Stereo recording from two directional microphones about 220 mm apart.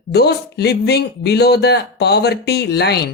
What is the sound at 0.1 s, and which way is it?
Speech, 50° left (ahead or behind).